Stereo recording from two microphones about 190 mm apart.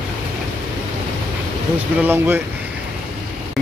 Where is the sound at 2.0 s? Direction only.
10° right (ahead or behind).